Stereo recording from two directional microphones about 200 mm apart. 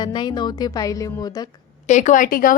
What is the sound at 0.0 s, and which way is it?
Speech, 20° left (ahead or behind).